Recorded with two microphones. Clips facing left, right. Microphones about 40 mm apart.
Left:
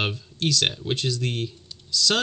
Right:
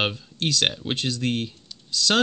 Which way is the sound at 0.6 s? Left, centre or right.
Right.